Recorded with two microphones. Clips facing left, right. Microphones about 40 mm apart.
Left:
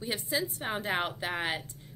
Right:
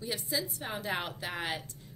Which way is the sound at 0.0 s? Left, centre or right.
Left.